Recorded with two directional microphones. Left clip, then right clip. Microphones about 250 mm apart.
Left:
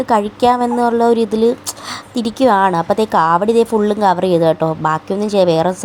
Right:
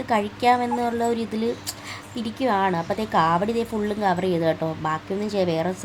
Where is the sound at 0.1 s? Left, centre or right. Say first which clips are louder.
Left 6 dB; left.